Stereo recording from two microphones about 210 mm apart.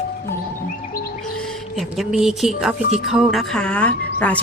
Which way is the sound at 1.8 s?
Centre (ahead or behind).